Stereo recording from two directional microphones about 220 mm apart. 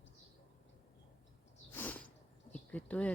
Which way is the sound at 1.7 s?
10° left (ahead or behind).